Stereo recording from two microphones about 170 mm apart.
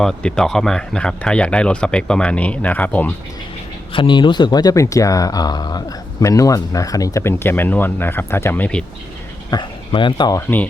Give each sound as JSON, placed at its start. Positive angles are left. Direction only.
{"t": 0.0, "sound": "speech", "side_deg": 5}
{"t": 3.9, "sound": "speech", "side_deg": 30}
{"t": 9.5, "sound": "speech", "side_deg": 25}